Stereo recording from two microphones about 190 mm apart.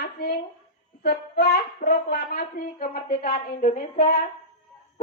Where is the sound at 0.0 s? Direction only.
55° left (ahead or behind).